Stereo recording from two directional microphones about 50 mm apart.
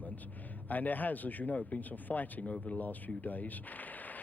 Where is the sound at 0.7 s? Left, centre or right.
Left.